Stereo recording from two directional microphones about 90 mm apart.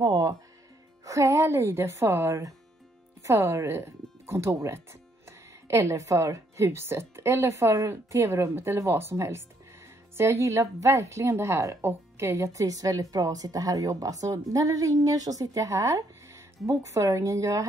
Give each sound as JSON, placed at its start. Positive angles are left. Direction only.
{"t": 0.0, "sound": "music", "side_deg": -50}
{"t": 1.0, "sound": "a woman's voice", "side_deg": -35}